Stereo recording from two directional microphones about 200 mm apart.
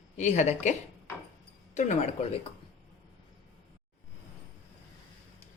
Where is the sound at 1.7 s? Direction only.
35° left (ahead or behind).